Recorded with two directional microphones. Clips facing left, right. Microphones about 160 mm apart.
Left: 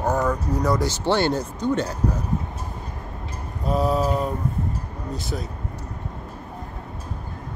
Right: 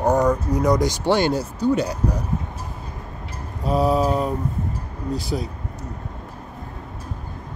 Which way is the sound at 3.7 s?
10° right (ahead or behind).